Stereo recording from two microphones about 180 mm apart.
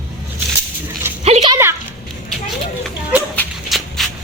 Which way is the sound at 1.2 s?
35° right (ahead or behind).